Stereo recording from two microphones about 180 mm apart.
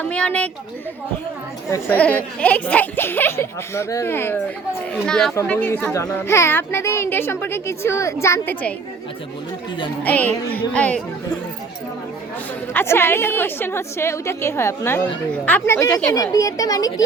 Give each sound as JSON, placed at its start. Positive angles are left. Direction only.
{"t": 0.0, "sound": "a child's voice", "side_deg": 5}
{"t": 1.7, "sound": "a child's voice", "side_deg": 10}
{"t": 10.0, "sound": "a child's voice", "side_deg": 10}
{"t": 12.7, "sound": "a child's voice", "side_deg": 15}